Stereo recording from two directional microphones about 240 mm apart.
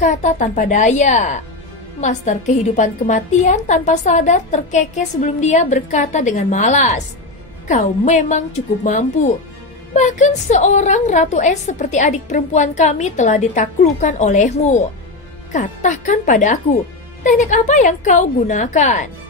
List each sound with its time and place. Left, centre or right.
0.0 s a woman's voice: left